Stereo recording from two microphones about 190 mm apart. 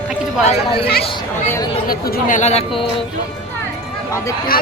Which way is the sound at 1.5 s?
15° left (ahead or behind).